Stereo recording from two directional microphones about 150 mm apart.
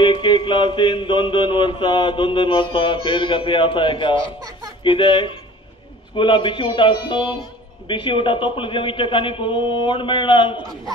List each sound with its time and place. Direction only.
0.0 s mantra: 30° left (ahead or behind)